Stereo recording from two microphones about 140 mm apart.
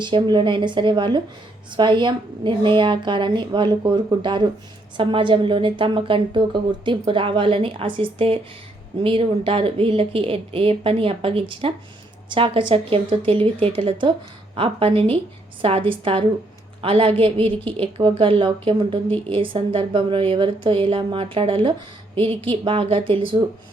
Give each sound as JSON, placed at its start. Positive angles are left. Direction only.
{"t": 0.0, "sound": "a woman's voice", "side_deg": -30}